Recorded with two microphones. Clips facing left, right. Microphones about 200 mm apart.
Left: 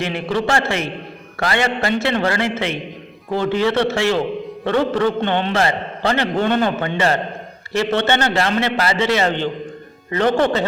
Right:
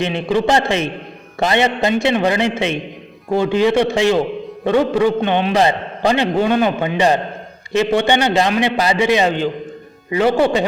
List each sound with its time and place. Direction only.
0.0 s a man's voice: 20° right (ahead or behind)